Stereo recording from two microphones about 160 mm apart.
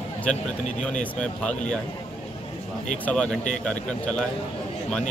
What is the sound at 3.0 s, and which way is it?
Speech, 5° left (ahead or behind).